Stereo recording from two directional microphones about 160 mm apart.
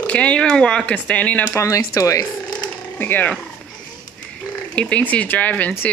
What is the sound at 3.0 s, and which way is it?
Speech, 10° left (ahead or behind).